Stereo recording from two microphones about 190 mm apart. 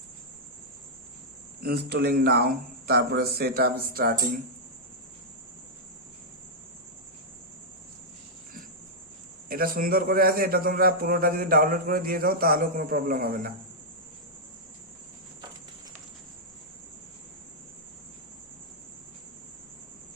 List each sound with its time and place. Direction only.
1.6 s speech: 55° right (ahead or behind)
9.5 s a man's voice: 50° right (ahead or behind)